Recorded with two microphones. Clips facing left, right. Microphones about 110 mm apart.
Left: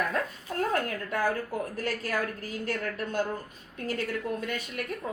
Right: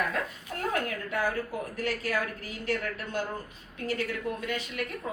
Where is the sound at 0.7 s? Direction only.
40° left (ahead or behind).